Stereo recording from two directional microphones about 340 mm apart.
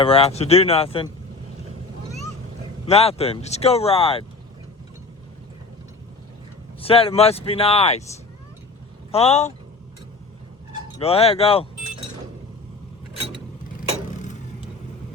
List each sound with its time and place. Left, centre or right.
0.0 s speech: centre
2.8 s speech: centre
6.7 s speech: centre
9.1 s speech: centre
10.9 s speech: centre
14.1 s vehicle: left